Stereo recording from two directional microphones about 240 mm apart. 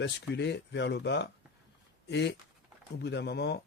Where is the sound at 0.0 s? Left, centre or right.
Left.